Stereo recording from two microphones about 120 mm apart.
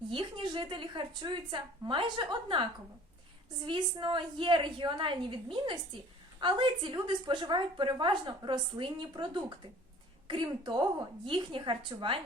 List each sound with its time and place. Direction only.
0.1 s a woman's voice: 45° right (ahead or behind)